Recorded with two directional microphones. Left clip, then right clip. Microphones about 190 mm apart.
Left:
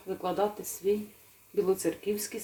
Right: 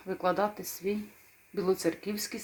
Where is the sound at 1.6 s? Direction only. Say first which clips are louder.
Right 2 dB; 15° right (ahead or behind).